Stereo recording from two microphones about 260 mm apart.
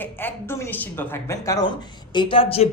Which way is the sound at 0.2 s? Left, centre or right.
Centre.